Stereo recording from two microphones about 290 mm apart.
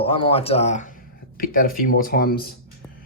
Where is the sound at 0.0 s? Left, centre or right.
Centre.